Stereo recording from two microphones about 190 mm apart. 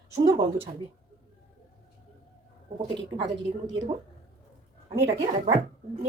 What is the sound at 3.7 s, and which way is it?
Speech, 25° right (ahead or behind).